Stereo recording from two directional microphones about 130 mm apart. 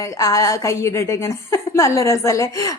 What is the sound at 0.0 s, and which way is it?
A woman's voice, 25° left (ahead or behind).